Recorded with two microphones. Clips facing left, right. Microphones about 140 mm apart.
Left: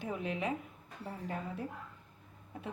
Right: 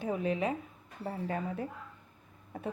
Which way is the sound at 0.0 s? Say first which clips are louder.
Right 5 dB; 35° right (ahead or behind).